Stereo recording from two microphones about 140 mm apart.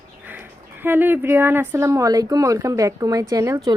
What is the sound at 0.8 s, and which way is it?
Speech, 15° right (ahead or behind).